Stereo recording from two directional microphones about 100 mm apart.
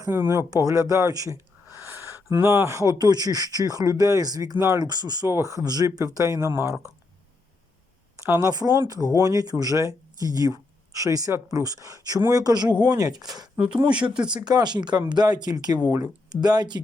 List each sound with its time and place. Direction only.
0.1 s speech: 25° right (ahead or behind)
4.5 s speech: 30° right (ahead or behind)
4.8 s speech: 40° right (ahead or behind)
8.1 s speech: 30° right (ahead or behind)
13.6 s speech: 10° right (ahead or behind)
14.3 s speech: 45° right (ahead or behind)